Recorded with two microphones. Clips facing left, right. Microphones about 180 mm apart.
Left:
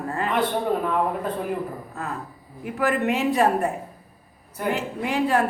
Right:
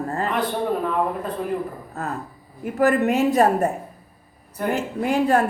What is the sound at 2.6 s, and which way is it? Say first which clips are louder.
Speech: right 4 dB; 45° right (ahead or behind).